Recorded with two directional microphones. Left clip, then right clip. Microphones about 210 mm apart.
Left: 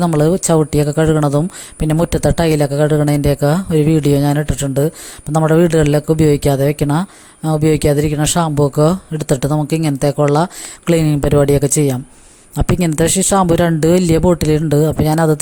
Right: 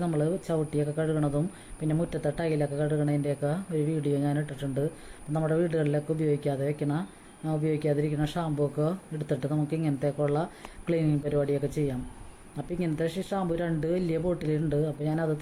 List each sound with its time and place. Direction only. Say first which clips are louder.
0.0 s speech: left 15 dB; 50° left (ahead or behind)